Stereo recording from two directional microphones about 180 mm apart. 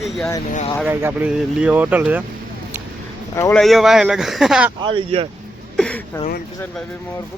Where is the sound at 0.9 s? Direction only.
10° right (ahead or behind).